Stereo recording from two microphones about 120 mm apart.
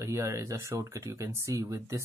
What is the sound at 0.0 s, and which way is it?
Speech, 25° right (ahead or behind).